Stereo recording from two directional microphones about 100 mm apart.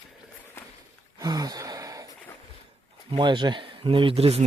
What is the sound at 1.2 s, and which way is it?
Gasp, 40° right (ahead or behind).